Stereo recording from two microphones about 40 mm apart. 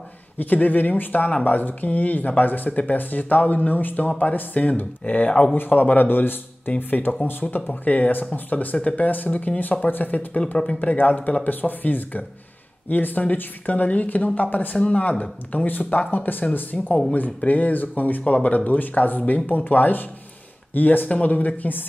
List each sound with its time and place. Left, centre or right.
0.4 s a man's voice: left